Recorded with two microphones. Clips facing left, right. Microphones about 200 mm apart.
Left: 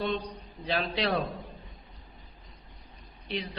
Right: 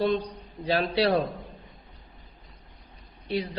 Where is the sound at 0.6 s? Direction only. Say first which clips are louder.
Right 6 dB; 35° right (ahead or behind).